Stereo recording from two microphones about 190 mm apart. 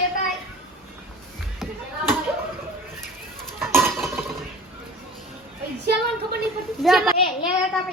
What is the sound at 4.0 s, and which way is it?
Cutlery, centre (ahead or behind).